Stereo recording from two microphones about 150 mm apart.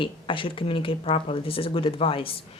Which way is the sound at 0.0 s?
35° left (ahead or behind).